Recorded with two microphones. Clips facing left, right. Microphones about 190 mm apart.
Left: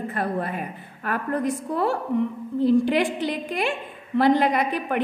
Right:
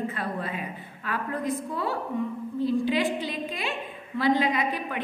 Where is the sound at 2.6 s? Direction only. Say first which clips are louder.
Left 5 dB; 65° left (ahead or behind).